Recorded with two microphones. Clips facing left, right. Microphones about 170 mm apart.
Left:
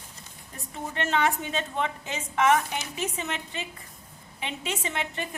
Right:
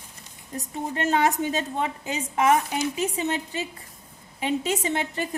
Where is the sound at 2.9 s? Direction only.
35° right (ahead or behind).